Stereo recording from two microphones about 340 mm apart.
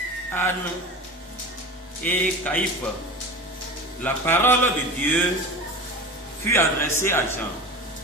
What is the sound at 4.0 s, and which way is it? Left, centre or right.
Speech, centre.